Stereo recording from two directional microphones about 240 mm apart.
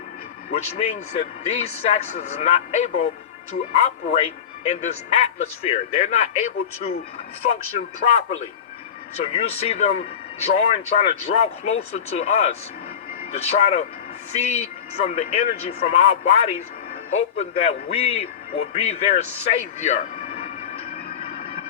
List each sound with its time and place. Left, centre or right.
0.5 s speech: left
8.0 s speech: left
18.2 s a sound: left